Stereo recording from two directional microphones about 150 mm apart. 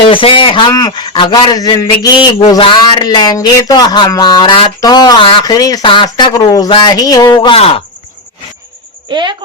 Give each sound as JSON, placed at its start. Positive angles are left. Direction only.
{"t": 0.1, "sound": "speech", "side_deg": 35}
{"t": 9.0, "sound": "speech", "side_deg": -30}